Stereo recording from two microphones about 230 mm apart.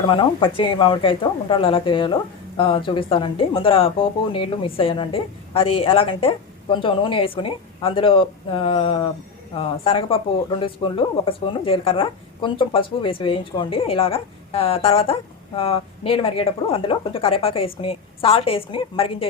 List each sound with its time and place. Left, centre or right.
0.0 s speech: left